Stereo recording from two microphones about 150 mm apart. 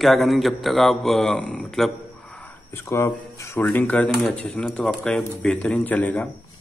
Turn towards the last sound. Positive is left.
turn(degrees=10)  # may be behind; listen again after turning